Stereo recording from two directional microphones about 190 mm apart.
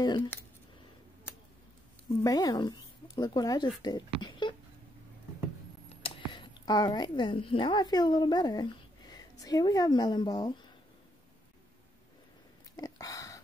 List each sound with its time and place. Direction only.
0.0 s speech: 25° left (ahead or behind)
2.0 s speech: 20° left (ahead or behind)
6.0 s a woman's voice: 25° left (ahead or behind)
12.7 s a sound: 20° left (ahead or behind)